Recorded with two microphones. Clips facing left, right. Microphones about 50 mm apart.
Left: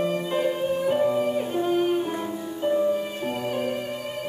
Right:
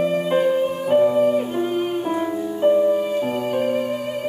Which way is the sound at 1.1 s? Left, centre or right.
Centre.